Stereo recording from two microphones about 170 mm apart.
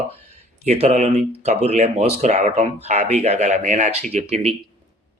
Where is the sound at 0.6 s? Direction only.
40° right (ahead or behind).